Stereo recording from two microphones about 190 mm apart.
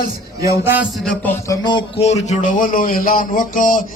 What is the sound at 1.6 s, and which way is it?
Speech, 30° left (ahead or behind).